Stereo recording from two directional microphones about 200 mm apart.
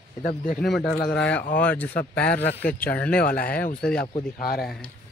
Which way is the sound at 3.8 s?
5° left (ahead or behind).